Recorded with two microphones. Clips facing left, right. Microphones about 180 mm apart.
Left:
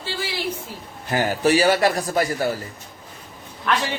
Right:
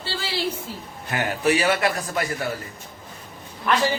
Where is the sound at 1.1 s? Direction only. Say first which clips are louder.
Left 3 dB; 35° left (ahead or behind).